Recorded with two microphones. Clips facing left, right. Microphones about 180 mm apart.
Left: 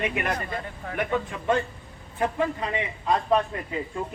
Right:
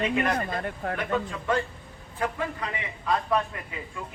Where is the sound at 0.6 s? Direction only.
55° right (ahead or behind).